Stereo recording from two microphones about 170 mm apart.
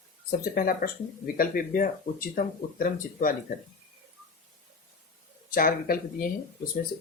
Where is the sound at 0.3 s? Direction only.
60° left (ahead or behind).